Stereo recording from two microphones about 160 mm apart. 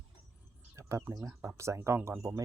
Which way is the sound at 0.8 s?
20° right (ahead or behind).